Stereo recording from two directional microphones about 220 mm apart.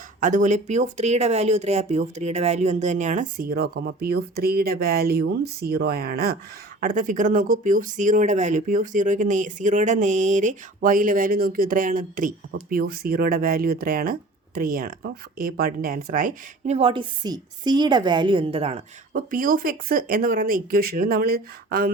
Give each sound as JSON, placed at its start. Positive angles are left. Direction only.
{"t": 0.2, "sound": "speech", "side_deg": -35}